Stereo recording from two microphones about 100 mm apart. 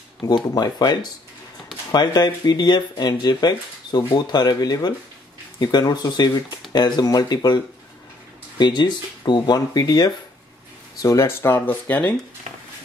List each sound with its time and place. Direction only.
0.3 s speech: 45° left (ahead or behind); by 12.2 s 20° left (ahead or behind)